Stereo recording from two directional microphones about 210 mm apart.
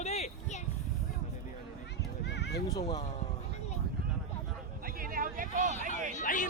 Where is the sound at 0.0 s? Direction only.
30° left (ahead or behind).